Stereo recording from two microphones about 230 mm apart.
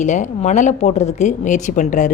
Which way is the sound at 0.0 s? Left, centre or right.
Left.